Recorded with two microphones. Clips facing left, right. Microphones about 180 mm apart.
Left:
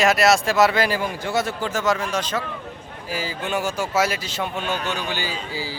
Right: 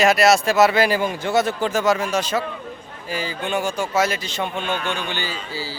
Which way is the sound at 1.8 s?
10° right (ahead or behind).